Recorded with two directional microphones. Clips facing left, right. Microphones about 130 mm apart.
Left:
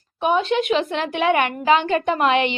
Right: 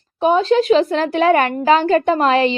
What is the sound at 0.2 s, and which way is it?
A woman's voice, 35° right (ahead or behind).